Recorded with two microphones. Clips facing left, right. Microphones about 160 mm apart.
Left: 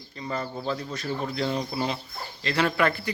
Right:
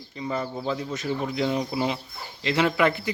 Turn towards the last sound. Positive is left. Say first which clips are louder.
# right 2 dB
turn(degrees=-20)  # may be behind; listen again after turning